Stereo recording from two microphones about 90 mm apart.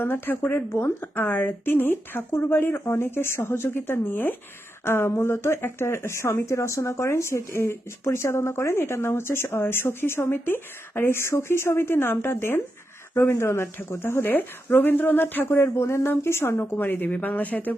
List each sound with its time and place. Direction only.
0.0 s speech: 20° left (ahead or behind)